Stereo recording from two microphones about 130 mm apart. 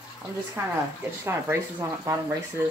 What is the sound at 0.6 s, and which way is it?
Speech, 20° right (ahead or behind).